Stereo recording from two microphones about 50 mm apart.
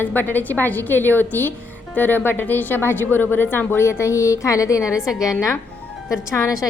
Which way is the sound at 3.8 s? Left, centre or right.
Left.